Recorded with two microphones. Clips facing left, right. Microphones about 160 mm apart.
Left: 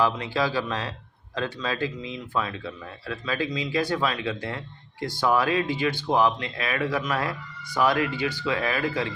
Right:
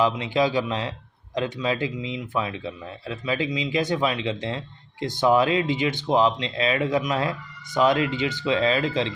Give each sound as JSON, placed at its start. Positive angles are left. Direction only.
{"t": 0.0, "sound": "speech", "side_deg": -20}